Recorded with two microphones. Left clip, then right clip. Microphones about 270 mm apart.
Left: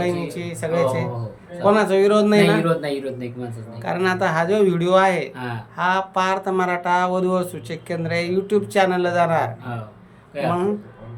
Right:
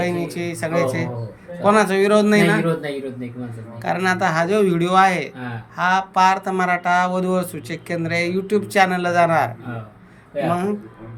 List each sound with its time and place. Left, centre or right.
0.0 s speech: centre
10.5 s speech: centre